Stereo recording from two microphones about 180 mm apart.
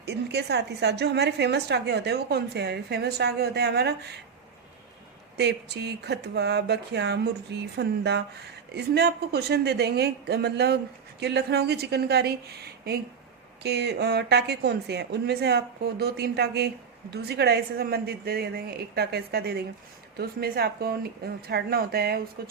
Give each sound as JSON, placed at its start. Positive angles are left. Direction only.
{"t": 0.0, "sound": "a woman's voice", "side_deg": -70}
{"t": 5.4, "sound": "a woman's voice", "side_deg": -65}